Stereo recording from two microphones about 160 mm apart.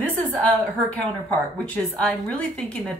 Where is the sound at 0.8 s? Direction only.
10° left (ahead or behind).